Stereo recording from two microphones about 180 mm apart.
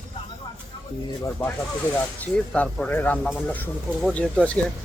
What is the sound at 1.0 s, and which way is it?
Speech, 15° left (ahead or behind).